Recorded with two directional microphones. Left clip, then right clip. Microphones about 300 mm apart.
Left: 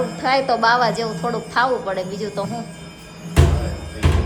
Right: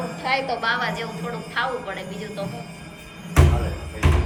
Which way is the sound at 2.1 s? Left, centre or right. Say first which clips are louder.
Left 6 dB; centre.